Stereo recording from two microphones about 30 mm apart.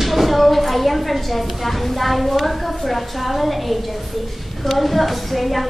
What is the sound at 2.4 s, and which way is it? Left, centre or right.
A woman's voice, centre.